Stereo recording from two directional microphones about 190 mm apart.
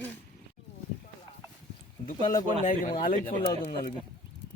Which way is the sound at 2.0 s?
40° left (ahead or behind).